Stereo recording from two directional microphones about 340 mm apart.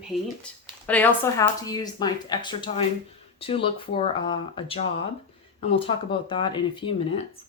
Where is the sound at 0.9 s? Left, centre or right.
Centre.